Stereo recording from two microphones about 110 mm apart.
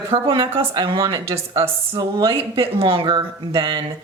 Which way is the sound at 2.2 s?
55° right (ahead or behind).